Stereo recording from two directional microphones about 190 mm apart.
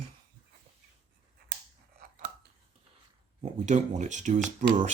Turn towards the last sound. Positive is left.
turn(degrees=-40)  # may be behind; listen again after turning